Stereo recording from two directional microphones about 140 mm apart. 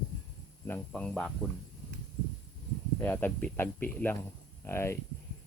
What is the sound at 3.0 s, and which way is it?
Speech, 10° left (ahead or behind).